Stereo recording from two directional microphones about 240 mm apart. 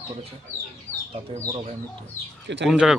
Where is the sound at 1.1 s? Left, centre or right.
Right.